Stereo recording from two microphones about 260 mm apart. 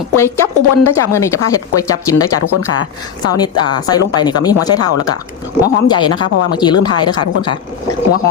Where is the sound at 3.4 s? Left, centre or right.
Centre.